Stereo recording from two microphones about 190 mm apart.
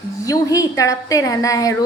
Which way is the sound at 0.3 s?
15° left (ahead or behind).